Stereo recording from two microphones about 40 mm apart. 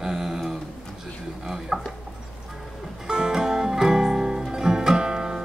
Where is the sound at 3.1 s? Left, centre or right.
Centre.